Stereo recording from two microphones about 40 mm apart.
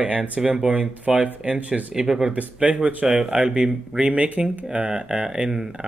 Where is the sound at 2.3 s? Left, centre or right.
Right.